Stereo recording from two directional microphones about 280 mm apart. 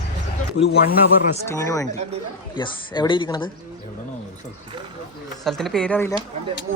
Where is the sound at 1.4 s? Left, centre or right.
Centre.